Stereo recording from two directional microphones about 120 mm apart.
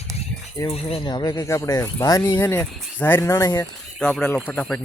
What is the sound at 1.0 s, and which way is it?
Speech, 35° left (ahead or behind).